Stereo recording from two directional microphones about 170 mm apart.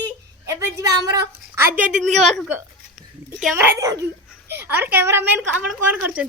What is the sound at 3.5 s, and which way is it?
A woman's voice, 15° right (ahead or behind).